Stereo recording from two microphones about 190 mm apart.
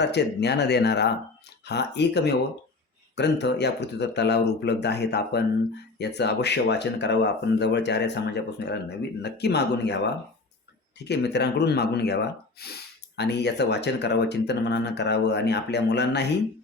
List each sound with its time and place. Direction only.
0.0 s speech: 65° left (ahead or behind)
11.1 s speech: 65° left (ahead or behind)